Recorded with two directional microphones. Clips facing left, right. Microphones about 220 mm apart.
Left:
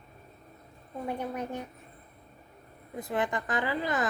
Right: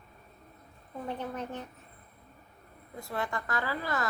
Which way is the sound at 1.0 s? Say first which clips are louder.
Left 3 dB; 10° left (ahead or behind).